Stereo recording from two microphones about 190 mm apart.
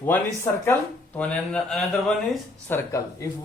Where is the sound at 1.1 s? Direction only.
5° left (ahead or behind).